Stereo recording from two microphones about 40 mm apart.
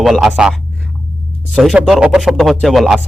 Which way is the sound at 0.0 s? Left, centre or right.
Centre.